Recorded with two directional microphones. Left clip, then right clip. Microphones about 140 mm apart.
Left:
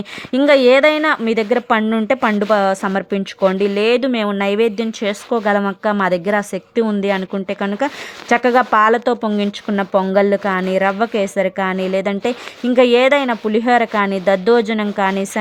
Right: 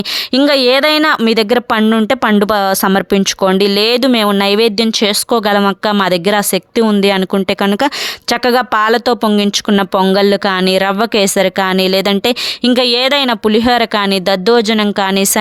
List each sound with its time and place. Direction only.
0.3 s speech: 20° right (ahead or behind)
0.9 s speech: 40° right (ahead or behind)
13.1 s speech: 25° right (ahead or behind)